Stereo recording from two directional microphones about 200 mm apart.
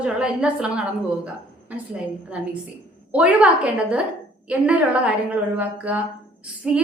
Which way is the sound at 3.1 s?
5° right (ahead or behind).